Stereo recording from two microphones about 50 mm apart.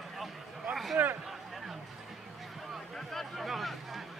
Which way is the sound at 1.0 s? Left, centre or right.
Right.